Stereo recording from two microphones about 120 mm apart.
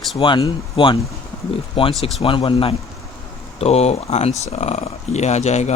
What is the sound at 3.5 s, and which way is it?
Speech, 60° left (ahead or behind).